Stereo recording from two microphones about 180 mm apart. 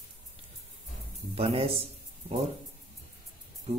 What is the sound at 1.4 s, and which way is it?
Speech, 35° right (ahead or behind).